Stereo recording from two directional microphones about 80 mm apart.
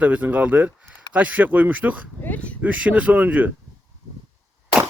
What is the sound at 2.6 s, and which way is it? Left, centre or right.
Speech, centre.